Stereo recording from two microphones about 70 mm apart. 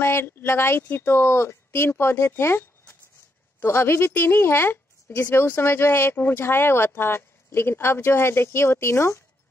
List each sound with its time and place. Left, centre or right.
0.0 s speech: left